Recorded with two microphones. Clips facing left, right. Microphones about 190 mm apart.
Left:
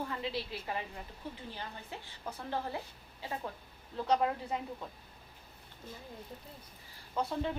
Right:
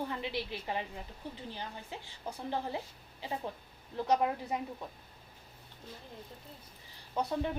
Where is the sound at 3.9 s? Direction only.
15° right (ahead or behind).